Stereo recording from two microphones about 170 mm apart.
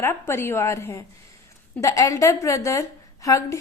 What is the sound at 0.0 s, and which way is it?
A woman's voice, 15° left (ahead or behind).